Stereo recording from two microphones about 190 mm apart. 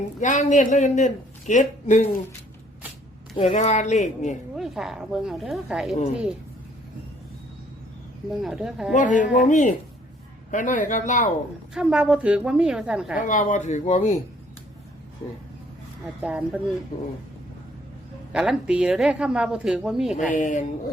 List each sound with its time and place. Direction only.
0.2 s speech: 40° left (ahead or behind)
3.3 s speech: 30° left (ahead or behind)
4.5 s a woman's voice: centre (ahead or behind)
8.3 s a woman's voice: centre (ahead or behind)
8.9 s speech: 40° left (ahead or behind)
11.7 s a woman's voice: 5° right (ahead or behind)
13.1 s speech: 45° left (ahead or behind)
16.2 s a woman's voice: 5° right (ahead or behind)
18.3 s a woman's voice: 5° right (ahead or behind)
20.1 s speech: 40° left (ahead or behind)